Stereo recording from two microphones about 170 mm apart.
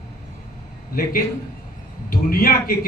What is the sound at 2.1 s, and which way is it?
Speech, 60° left (ahead or behind).